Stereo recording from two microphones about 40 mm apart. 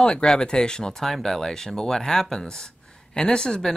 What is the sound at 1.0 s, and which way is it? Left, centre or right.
Speech, centre.